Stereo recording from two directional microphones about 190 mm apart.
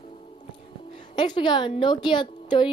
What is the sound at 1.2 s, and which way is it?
A woman's voice, 25° left (ahead or behind).